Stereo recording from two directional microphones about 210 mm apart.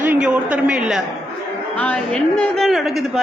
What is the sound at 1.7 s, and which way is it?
Speech, 5° left (ahead or behind).